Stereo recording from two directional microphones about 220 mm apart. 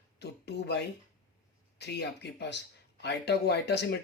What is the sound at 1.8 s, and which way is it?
Speech, 50° left (ahead or behind).